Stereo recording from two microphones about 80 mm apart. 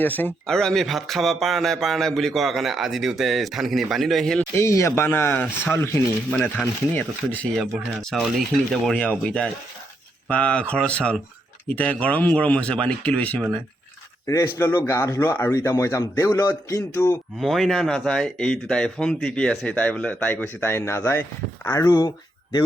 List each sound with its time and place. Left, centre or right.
0.0 s speech: left
0.4 s a man's voice: centre
4.5 s speech: left
7.6 s a man's voice: centre
14.4 s speech: left
17.4 s a man's voice: centre; by 21.7 s left
21.7 s speech: left